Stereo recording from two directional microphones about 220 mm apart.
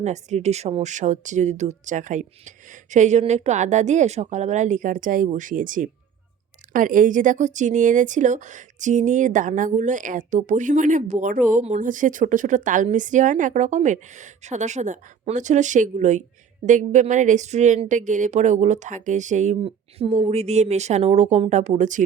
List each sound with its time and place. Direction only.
0.0 s speech: 30° right (ahead or behind)